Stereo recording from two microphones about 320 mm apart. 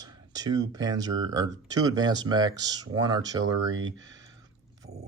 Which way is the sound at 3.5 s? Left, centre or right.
Right.